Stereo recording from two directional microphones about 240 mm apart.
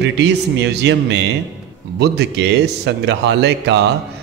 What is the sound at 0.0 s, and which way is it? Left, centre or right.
A man's voice, right.